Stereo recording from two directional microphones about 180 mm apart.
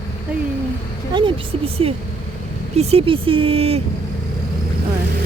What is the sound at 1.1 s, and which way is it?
Speech, 30° right (ahead or behind).